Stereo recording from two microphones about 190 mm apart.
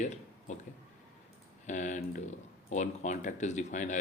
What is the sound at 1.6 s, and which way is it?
Speech, 40° left (ahead or behind).